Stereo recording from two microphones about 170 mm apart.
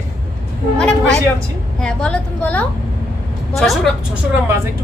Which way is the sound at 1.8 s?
5° left (ahead or behind).